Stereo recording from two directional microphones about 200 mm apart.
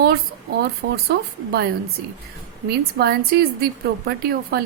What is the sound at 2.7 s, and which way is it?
A woman's voice, 50° right (ahead or behind).